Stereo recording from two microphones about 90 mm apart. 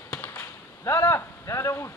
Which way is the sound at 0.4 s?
30° left (ahead or behind).